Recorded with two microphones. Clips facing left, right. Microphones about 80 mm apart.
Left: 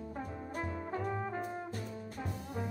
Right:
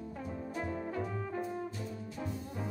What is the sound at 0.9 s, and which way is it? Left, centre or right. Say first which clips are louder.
Brass instrument: left 1 dB; left.